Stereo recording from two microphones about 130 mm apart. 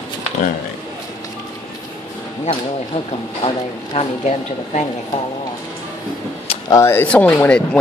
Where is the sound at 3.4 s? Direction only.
45° left (ahead or behind).